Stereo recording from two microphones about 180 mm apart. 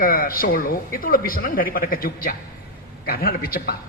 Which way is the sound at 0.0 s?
55° left (ahead or behind).